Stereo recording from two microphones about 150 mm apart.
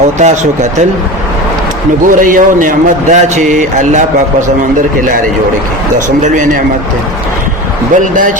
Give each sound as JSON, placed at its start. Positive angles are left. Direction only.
{"t": 0.2, "sound": "speech", "side_deg": -50}
{"t": 2.0, "sound": "a man's voice", "side_deg": -65}
{"t": 6.2, "sound": "a man's voice", "side_deg": -60}
{"t": 7.9, "sound": "a man's voice", "side_deg": -60}